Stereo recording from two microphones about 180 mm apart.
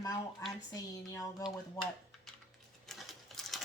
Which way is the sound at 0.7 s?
20° left (ahead or behind).